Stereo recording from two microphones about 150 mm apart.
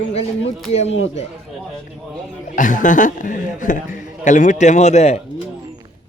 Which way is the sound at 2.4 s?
60° left (ahead or behind).